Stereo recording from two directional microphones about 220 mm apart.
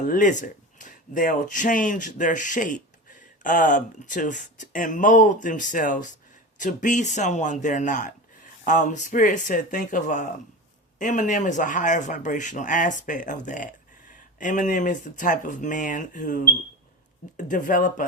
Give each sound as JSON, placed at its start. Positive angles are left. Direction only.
{"t": 0.0, "sound": "speech", "side_deg": 35}